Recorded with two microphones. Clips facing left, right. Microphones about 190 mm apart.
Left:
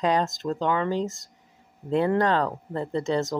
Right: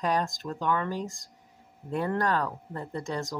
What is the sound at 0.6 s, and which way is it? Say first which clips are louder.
Speech: left 4 dB; 90° left.